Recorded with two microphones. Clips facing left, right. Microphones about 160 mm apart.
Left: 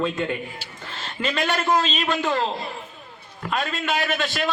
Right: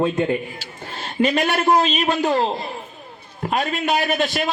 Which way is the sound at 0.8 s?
40° right (ahead or behind).